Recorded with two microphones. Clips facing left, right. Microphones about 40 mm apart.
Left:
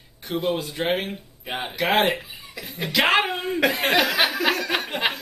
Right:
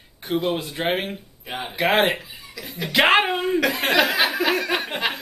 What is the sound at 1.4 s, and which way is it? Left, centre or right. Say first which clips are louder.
Speech: left 1 dB; centre.